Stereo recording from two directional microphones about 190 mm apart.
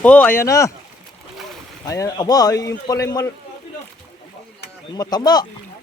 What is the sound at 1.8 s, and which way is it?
A man's voice, 20° left (ahead or behind).